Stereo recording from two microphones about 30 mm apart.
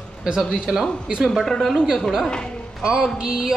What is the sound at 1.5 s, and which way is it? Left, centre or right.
Speech, centre.